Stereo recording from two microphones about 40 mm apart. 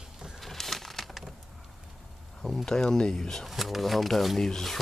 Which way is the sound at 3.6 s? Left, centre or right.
Centre.